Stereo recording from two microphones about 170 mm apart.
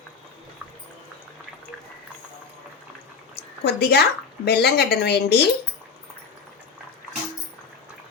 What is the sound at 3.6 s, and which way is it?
A woman's voice, 70° left (ahead or behind).